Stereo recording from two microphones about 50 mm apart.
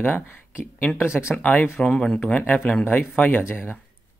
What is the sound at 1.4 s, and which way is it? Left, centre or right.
Speech, left.